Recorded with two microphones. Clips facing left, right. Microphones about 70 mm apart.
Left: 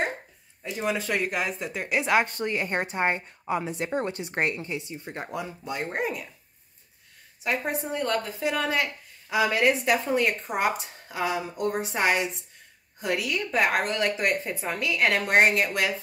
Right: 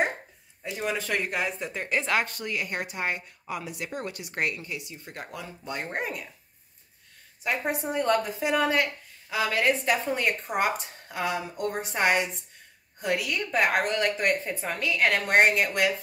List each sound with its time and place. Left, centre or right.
0.7 s speech: centre
2.2 s a woman's voice: left
5.6 s speech: centre
7.4 s speech: centre
9.3 s speech: centre